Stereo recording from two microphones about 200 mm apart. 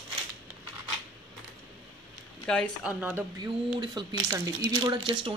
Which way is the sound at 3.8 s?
20° right (ahead or behind).